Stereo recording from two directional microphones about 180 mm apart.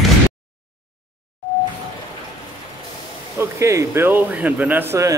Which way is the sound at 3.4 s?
15° right (ahead or behind).